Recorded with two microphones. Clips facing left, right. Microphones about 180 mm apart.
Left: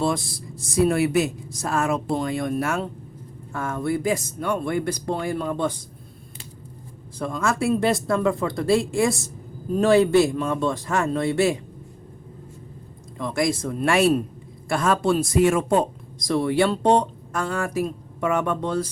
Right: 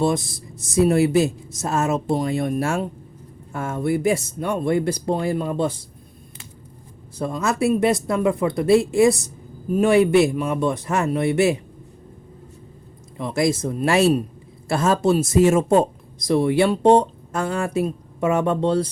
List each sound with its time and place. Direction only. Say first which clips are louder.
0.0 s speech: right 3 dB; 20° right (ahead or behind)
7.2 s speech: right 2 dB; 20° right (ahead or behind)
13.1 s speech: right 2 dB; 20° right (ahead or behind)